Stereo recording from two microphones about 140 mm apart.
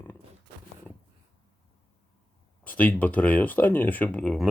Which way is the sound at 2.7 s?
10° left (ahead or behind).